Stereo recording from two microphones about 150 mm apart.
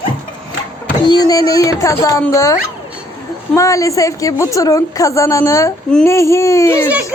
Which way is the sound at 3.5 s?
20° left (ahead or behind).